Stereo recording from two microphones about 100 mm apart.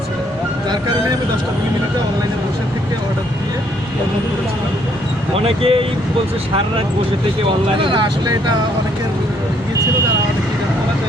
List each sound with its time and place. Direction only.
5.4 s speech: 70° right (ahead or behind)
7.8 s speech: 55° right (ahead or behind)